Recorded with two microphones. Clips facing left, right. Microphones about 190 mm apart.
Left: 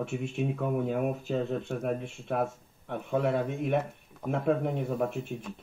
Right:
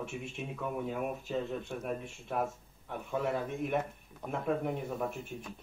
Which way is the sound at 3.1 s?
60° left (ahead or behind).